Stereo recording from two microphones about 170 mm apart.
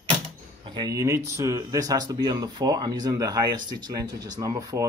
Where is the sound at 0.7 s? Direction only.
20° right (ahead or behind).